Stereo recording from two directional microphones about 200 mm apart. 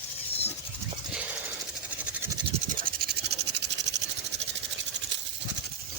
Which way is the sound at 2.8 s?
50° right (ahead or behind).